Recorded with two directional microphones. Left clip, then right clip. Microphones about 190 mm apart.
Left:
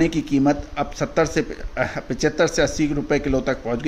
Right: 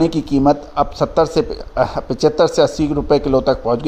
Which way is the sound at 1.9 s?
15° right (ahead or behind).